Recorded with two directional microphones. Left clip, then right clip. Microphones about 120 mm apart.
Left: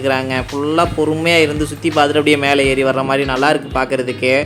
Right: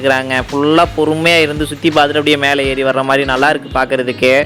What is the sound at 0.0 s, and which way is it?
Speech, 40° right (ahead or behind).